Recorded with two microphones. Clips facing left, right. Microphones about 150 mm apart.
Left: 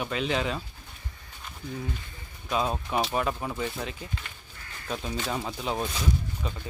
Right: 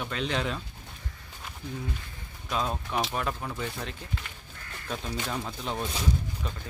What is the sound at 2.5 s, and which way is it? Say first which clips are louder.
Speech: left 3 dB; 5° left (ahead or behind).